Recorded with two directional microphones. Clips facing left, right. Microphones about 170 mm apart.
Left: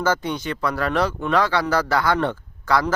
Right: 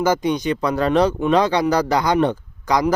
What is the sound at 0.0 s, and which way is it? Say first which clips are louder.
Speech: right 4 dB; 15° right (ahead or behind).